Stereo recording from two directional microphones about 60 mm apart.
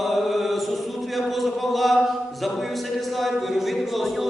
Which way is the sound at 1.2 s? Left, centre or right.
Centre.